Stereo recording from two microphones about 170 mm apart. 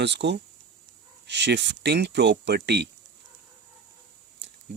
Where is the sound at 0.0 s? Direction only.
90° right.